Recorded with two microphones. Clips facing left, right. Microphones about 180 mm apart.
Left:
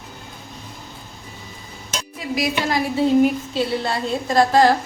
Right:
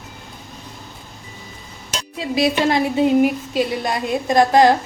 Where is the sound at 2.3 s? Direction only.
25° right (ahead or behind).